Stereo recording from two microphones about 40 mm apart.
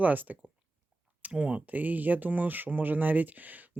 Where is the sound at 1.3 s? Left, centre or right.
Right.